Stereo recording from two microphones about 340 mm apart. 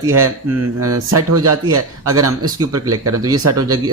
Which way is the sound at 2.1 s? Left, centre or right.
Centre.